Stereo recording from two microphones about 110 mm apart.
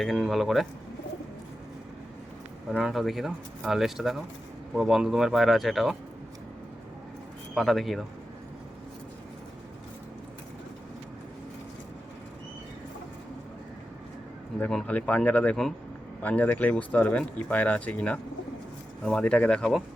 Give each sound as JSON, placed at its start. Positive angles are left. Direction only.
{"t": 0.0, "sound": "speech", "side_deg": 0}
{"t": 2.6, "sound": "speech", "side_deg": 0}
{"t": 7.5, "sound": "speech", "side_deg": 0}
{"t": 14.7, "sound": "speech", "side_deg": 10}